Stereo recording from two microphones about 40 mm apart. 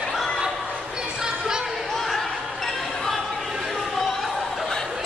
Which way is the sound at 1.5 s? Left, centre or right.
Centre.